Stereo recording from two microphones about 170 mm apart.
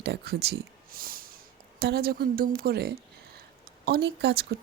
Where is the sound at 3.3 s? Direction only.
65° right (ahead or behind).